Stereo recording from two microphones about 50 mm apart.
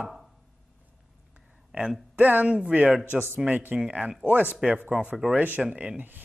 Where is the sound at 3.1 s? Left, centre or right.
Right.